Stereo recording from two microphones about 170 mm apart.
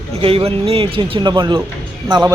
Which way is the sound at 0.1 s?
35° right (ahead or behind).